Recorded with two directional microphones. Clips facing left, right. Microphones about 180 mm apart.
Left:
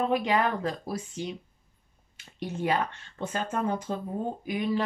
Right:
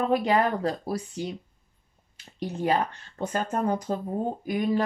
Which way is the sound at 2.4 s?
35° right (ahead or behind).